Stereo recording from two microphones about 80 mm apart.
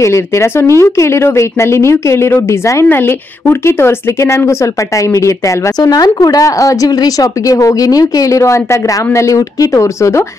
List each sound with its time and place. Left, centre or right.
0.0 s speech: left
2.9 s speech: left
5.8 s speech: left